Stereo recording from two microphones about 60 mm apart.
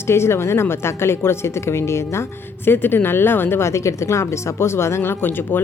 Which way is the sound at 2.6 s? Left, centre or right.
Left.